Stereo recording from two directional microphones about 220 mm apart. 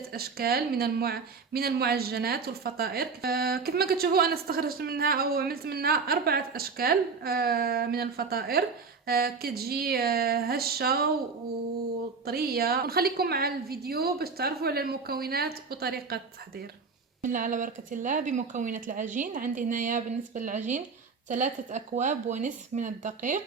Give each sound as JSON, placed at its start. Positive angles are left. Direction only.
{"t": 0.1, "sound": "speech", "side_deg": -45}
{"t": 12.2, "sound": "speech", "side_deg": -45}
{"t": 17.2, "sound": "speech", "side_deg": -35}